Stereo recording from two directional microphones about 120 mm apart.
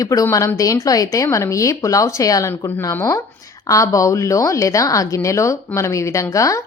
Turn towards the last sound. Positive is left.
turn(degrees=25)  # may be behind; listen again after turning